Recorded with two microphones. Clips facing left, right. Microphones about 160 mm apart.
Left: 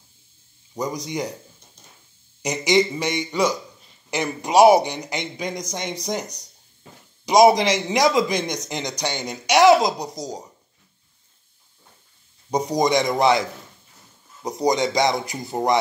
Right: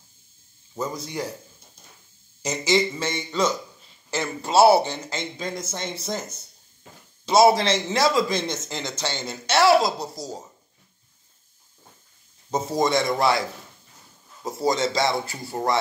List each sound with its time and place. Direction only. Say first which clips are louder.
0.7 s speech: left 3 dB; 15° left (ahead or behind)
2.4 s speech: left 3 dB; 15° left (ahead or behind)
12.4 s speech: left 3 dB; 15° left (ahead or behind)